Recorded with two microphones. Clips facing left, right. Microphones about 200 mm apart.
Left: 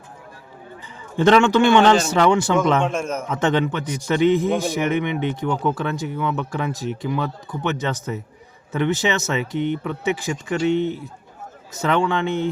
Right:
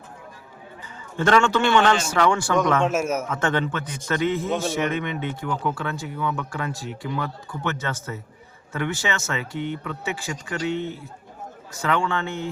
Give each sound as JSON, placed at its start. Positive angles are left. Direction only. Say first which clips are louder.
{"t": 1.1, "sound": "a man's voice", "louder": "left 5 dB", "side_deg": 20}
{"t": 2.8, "sound": "a man's voice", "louder": "right 1 dB", "side_deg": -5}
{"t": 3.2, "sound": "a man's voice", "louder": "left 4 dB", "side_deg": 20}